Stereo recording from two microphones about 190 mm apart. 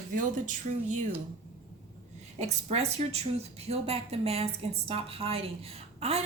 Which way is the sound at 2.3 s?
35° right (ahead or behind).